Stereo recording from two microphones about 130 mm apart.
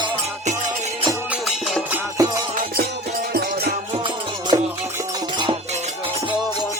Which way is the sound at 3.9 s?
40° right (ahead or behind).